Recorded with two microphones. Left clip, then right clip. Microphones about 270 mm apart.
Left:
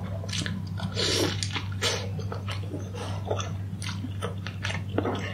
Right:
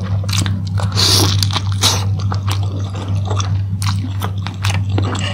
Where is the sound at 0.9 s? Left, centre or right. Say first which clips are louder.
Right 12 dB; centre.